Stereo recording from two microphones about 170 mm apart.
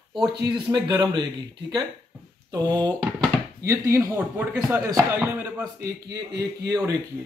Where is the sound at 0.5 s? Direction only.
25° right (ahead or behind).